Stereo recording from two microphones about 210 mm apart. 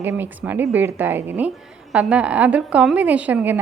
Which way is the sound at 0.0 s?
10° right (ahead or behind).